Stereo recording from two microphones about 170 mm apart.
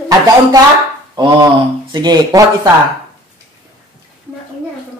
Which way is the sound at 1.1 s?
25° right (ahead or behind).